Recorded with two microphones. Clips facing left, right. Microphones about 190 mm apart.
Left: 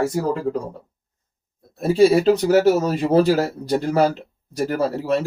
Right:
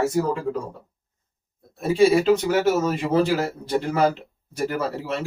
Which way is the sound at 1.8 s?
40° left (ahead or behind).